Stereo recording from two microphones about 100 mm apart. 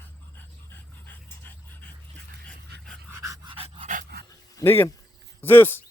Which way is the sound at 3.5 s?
75° right (ahead or behind).